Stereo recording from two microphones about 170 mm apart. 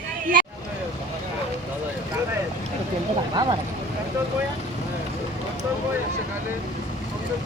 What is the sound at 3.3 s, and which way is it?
Speech, 25° right (ahead or behind).